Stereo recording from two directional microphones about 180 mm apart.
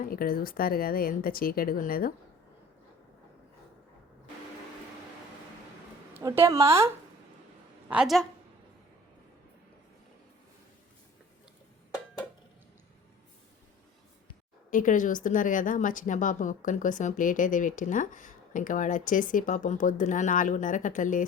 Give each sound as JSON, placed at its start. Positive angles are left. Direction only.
{"t": 0.0, "sound": "speech", "side_deg": 55}
{"t": 6.1, "sound": "speech", "side_deg": -15}
{"t": 7.9, "sound": "a woman's voice", "side_deg": -5}
{"t": 14.7, "sound": "a woman's voice", "side_deg": 45}